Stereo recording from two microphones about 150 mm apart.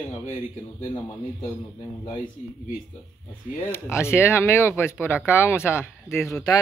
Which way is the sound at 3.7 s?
15° left (ahead or behind).